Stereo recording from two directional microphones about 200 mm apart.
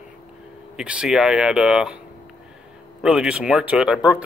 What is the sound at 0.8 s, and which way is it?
Speech, 5° right (ahead or behind).